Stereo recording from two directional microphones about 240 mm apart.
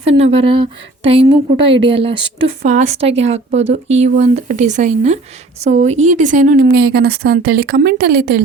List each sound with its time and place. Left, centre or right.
0.0 s speech: right